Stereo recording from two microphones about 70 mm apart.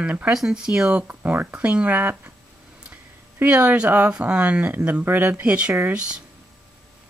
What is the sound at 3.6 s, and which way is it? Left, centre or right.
Speech, right.